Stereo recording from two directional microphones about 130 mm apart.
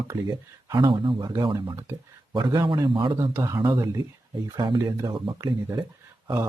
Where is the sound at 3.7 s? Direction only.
25° right (ahead or behind).